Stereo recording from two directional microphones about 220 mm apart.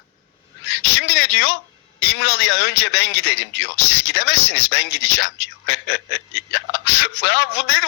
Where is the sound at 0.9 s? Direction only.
55° left (ahead or behind).